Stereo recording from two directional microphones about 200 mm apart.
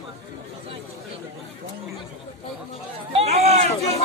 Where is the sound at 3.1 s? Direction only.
30° right (ahead or behind).